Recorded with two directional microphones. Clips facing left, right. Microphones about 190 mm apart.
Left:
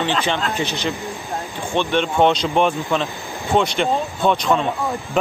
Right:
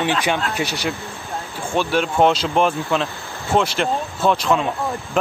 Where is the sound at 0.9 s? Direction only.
15° left (ahead or behind).